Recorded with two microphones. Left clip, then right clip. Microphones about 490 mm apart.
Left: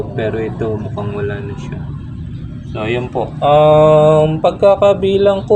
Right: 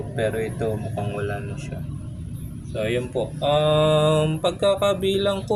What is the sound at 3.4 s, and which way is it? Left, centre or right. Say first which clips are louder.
Mantra: left 11 dB; right.